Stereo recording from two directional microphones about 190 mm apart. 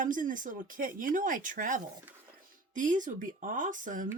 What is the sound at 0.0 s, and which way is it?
Speech, 45° right (ahead or behind).